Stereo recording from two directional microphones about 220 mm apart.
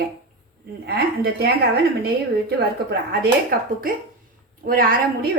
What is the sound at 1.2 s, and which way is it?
Speech, 45° right (ahead or behind).